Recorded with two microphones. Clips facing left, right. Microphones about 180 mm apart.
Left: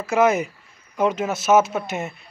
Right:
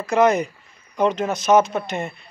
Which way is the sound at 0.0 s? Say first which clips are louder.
Right 1 dB; 5° left (ahead or behind).